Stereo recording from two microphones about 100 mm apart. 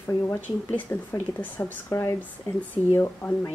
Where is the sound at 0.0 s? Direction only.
20° left (ahead or behind).